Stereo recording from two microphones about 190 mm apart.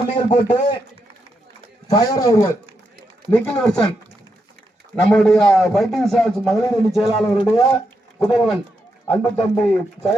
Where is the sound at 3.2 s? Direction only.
5° left (ahead or behind).